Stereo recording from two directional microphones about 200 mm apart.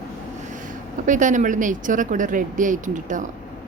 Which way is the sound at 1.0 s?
40° right (ahead or behind).